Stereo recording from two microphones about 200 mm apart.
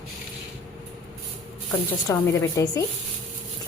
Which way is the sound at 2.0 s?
15° left (ahead or behind).